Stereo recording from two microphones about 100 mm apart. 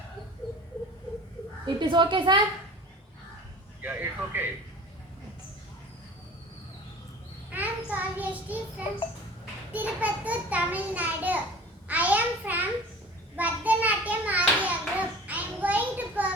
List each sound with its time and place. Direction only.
1.6 s a woman's voice: 50° right (ahead or behind)
3.8 s speech: 20° right (ahead or behind)
7.5 s child singing: 15° right (ahead or behind)
9.7 s a child's voice: 15° right (ahead or behind)
13.3 s a sound: 15° right (ahead or behind)